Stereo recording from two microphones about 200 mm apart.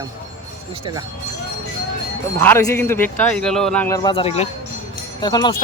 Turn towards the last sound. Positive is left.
turn(degrees=20)  # may be behind; listen again after turning